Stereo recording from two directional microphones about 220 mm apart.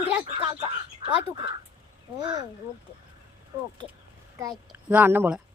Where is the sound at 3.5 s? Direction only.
15° right (ahead or behind).